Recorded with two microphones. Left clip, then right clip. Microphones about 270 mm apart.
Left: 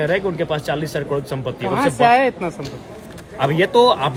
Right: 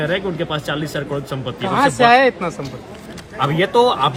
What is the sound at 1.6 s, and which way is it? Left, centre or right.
Speech, right.